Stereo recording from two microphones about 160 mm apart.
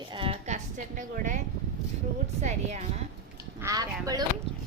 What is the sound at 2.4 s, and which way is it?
Speech, 45° right (ahead or behind).